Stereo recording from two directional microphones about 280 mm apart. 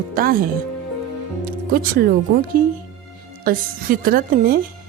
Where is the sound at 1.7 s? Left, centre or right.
Right.